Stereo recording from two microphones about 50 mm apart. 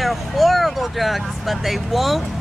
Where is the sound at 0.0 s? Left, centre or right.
Centre.